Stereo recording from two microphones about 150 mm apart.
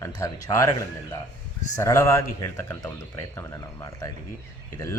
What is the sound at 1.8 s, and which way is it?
Speech, 20° left (ahead or behind).